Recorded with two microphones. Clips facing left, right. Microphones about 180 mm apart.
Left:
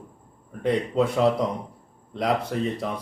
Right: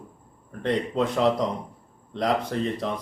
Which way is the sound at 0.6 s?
5° left (ahead or behind).